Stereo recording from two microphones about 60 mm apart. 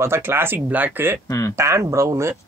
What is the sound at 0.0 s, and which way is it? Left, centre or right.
Speech, right.